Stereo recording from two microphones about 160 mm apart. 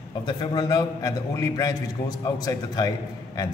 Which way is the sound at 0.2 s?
25° left (ahead or behind).